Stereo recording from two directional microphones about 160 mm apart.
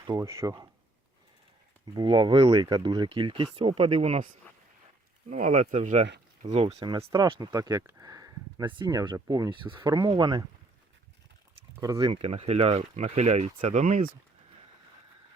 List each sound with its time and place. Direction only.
0.1 s speech: 20° right (ahead or behind)
1.9 s speech: 25° right (ahead or behind)
11.9 s speech: 35° right (ahead or behind)